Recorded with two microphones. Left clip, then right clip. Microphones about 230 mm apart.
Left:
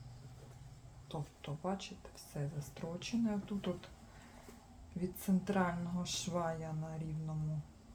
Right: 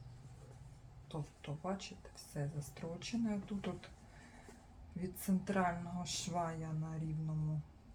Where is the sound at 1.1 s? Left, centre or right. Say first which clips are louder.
Left 2 dB; left.